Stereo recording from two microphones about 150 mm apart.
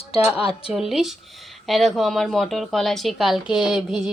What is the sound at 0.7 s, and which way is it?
A woman's voice, centre (ahead or behind).